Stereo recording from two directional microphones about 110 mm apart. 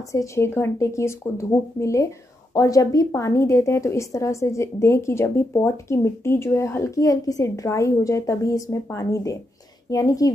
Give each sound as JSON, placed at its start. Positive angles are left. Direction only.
{"t": 0.1, "sound": "a woman's voice", "side_deg": 25}